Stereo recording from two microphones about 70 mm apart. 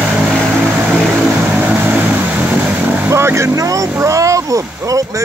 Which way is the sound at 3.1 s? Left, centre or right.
Right.